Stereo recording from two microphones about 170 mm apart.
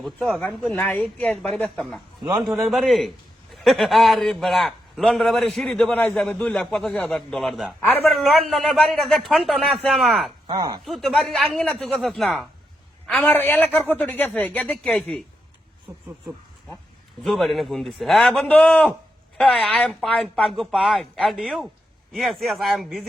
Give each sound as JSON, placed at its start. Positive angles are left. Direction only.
{"t": 0.0, "sound": "a man's voice", "side_deg": 0}
{"t": 10.4, "sound": "speech", "side_deg": -25}
{"t": 10.8, "sound": "a man's voice", "side_deg": 0}
{"t": 17.2, "sound": "a man's voice", "side_deg": 0}